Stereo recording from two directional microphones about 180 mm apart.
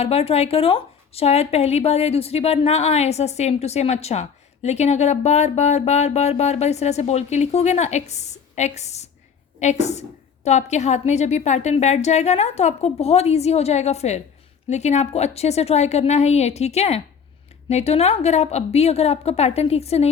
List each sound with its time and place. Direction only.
0.0 s speech: 35° left (ahead or behind)